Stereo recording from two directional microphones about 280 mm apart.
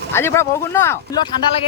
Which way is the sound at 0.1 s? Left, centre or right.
Centre.